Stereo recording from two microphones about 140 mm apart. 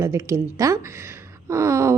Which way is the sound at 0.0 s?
20° right (ahead or behind).